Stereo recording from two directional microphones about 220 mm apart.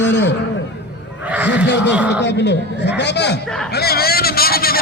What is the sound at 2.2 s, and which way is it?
A man's voice, 50° left (ahead or behind).